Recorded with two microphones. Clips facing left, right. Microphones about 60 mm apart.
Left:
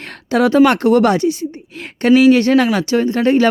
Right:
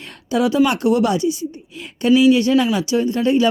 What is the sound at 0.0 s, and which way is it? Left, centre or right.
Speech, left.